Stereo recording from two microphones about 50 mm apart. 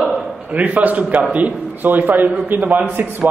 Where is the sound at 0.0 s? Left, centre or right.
Right.